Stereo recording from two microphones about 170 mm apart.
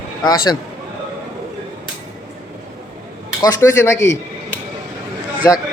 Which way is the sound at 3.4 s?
20° left (ahead or behind).